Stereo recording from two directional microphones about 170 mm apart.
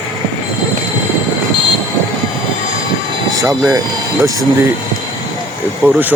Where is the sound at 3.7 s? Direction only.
20° right (ahead or behind).